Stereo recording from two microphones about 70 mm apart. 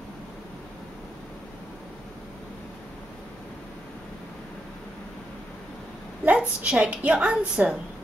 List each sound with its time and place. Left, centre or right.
6.2 s a woman's voice: centre